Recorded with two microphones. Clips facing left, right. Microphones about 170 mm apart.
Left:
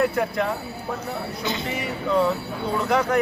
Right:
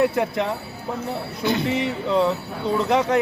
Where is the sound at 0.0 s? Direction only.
20° right (ahead or behind).